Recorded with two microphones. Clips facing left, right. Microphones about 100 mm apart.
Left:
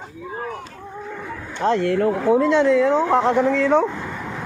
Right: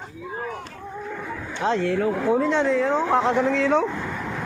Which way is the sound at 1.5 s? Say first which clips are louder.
Left 4 dB; 55° left (ahead or behind).